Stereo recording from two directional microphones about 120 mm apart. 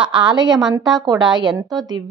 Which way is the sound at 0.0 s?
40° right (ahead or behind).